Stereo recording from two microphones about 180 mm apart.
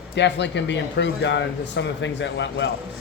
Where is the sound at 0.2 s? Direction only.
75° left (ahead or behind).